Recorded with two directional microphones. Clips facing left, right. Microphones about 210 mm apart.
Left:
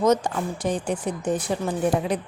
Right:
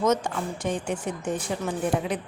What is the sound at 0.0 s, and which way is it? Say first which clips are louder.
A woman's voice: left 3 dB; 35° left (ahead or behind).